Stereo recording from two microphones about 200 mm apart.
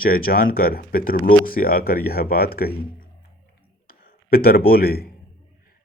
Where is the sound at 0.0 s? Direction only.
45° left (ahead or behind).